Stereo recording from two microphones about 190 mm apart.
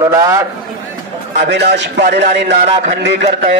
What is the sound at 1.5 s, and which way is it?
A man's voice, 65° right (ahead or behind).